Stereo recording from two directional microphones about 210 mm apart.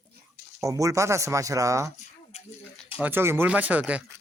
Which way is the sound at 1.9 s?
35° left (ahead or behind).